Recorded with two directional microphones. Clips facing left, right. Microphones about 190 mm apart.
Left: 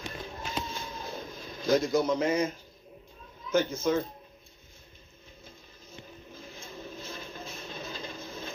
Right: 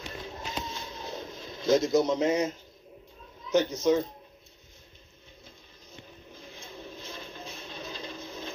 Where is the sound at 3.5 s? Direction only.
20° right (ahead or behind).